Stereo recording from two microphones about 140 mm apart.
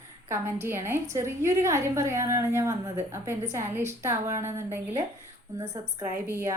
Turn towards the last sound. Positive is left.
turn(degrees=-20)  # may be behind; listen again after turning